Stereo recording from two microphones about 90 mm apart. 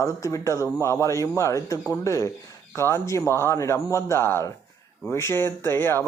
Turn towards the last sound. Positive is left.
turn(degrees=25)  # may be behind; listen again after turning